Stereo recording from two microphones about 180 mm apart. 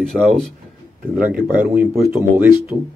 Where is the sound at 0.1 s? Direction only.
Centre (ahead or behind).